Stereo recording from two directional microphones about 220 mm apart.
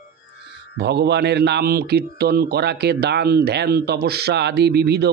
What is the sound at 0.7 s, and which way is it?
A man's voice, 50° right (ahead or behind).